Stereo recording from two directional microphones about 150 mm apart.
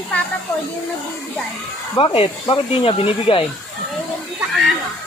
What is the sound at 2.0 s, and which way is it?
Speech, 40° left (ahead or behind).